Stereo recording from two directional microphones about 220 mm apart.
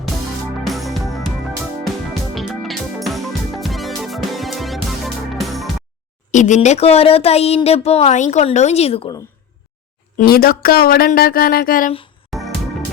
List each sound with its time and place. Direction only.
0.6 s music: centre (ahead or behind)
2.5 s music: centre (ahead or behind)
6.3 s speech: 35° left (ahead or behind)
10.2 s speech: 40° left (ahead or behind)
12.3 s music: centre (ahead or behind)